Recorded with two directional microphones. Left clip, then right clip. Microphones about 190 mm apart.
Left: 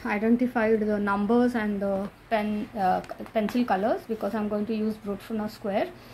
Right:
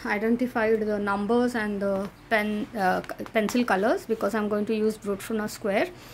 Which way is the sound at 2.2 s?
35° right (ahead or behind).